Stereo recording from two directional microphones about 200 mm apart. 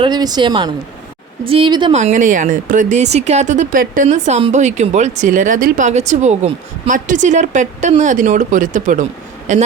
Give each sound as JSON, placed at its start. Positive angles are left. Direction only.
{"t": 0.0, "sound": "a woman's voice", "side_deg": -20}
{"t": 2.0, "sound": "speech", "side_deg": -40}